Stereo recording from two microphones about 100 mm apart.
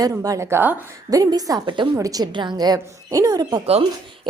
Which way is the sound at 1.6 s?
55° right (ahead or behind).